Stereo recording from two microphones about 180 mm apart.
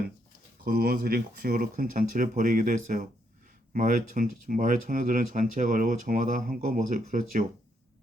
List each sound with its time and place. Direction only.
0.6 s speech: 60° right (ahead or behind)